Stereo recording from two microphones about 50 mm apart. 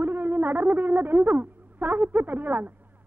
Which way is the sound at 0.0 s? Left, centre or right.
Right.